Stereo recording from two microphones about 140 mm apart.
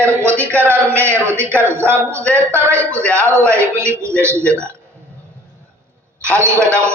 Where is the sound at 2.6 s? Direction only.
20° right (ahead or behind).